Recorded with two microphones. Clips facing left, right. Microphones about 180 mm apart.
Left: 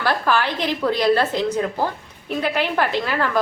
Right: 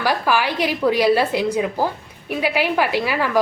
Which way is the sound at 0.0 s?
10° right (ahead or behind).